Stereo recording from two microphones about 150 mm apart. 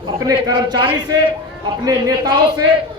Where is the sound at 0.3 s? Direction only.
25° right (ahead or behind).